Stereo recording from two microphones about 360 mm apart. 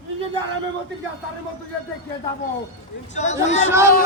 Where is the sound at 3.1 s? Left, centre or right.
Centre.